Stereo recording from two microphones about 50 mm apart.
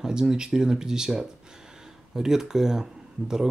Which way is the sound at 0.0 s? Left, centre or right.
Centre.